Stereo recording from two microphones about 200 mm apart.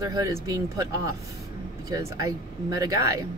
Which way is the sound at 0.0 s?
20° right (ahead or behind).